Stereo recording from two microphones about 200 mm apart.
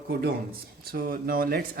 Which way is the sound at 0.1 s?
55° right (ahead or behind).